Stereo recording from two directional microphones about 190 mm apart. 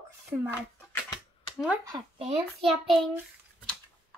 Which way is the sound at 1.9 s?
25° right (ahead or behind).